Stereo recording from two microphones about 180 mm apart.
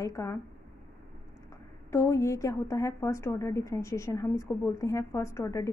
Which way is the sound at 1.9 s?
15° left (ahead or behind).